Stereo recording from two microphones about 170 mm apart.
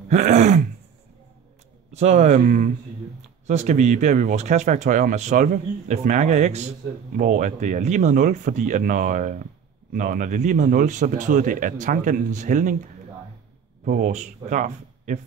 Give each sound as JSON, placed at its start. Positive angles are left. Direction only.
{"t": 0.1, "sound": "throat clearing", "side_deg": -45}
{"t": 1.9, "sound": "speech", "side_deg": -40}
{"t": 13.8, "sound": "speech", "side_deg": -50}